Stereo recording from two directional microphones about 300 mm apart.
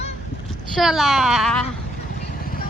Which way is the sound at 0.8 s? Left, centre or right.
Centre.